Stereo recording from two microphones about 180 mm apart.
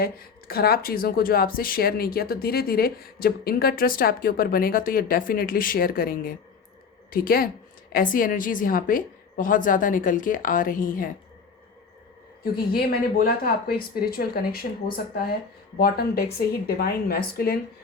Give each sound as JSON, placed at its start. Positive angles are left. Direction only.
{"t": 0.0, "sound": "a woman's voice", "side_deg": 55}
{"t": 12.7, "sound": "speech", "side_deg": 55}